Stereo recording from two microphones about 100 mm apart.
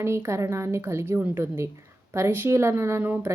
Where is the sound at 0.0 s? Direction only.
25° right (ahead or behind).